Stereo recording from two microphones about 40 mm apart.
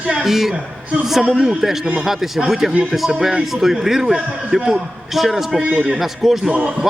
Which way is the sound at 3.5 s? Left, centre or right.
Centre.